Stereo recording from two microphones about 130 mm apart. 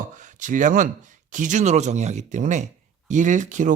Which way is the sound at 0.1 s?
75° right (ahead or behind).